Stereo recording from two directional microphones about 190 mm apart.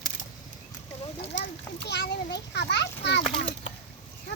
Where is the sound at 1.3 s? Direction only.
65° left (ahead or behind).